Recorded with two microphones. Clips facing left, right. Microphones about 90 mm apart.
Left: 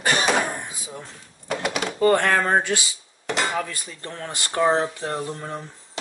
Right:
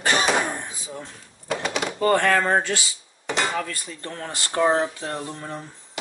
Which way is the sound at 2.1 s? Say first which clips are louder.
Even; 15° left (ahead or behind).